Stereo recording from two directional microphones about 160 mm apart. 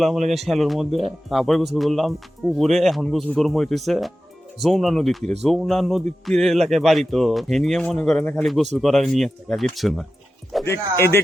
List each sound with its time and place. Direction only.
0.3 s speech: centre (ahead or behind)
10.7 s speech: 15° left (ahead or behind)